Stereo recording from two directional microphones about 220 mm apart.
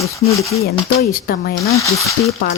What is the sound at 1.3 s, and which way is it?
Speech, 40° left (ahead or behind).